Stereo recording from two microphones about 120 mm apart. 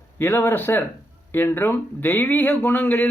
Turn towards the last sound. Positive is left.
turn(degrees=15)  # may be behind; listen again after turning